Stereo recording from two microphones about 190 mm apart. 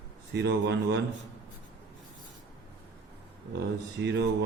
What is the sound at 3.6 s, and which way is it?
Speech, 65° right (ahead or behind).